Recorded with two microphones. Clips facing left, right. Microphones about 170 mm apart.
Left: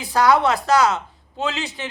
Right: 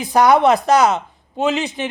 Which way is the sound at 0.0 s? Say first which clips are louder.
Right 4 dB; 20° right (ahead or behind).